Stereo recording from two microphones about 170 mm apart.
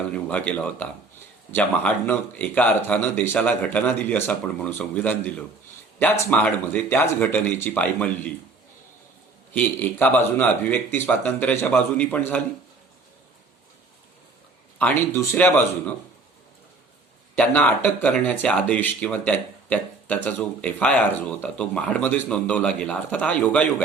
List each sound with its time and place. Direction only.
0.3 s speech: 10° left (ahead or behind)
9.5 s speech: 10° left (ahead or behind)
14.8 s speech: 10° left (ahead or behind)
17.3 s speech: 10° left (ahead or behind)